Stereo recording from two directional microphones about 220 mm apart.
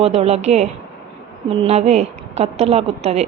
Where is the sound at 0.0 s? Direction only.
30° right (ahead or behind).